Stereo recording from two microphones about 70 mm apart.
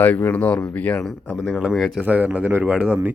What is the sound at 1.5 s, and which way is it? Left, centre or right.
Speech, centre.